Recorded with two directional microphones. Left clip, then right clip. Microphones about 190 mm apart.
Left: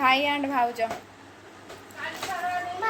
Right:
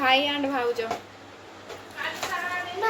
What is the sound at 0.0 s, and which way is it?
Speech, 60° left (ahead or behind).